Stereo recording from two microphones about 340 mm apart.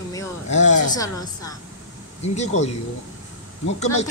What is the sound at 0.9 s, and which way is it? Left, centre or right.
A woman's voice, centre.